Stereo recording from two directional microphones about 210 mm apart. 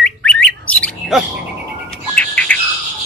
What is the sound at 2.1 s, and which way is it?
Chirp, 5° left (ahead or behind).